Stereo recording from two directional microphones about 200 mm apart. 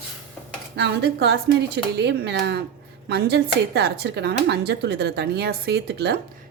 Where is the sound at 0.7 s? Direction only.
55° right (ahead or behind).